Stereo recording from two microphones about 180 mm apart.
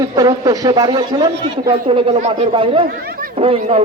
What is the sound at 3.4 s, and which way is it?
Speech, 35° right (ahead or behind).